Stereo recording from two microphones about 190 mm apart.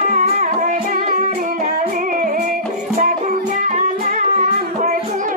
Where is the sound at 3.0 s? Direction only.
45° right (ahead or behind).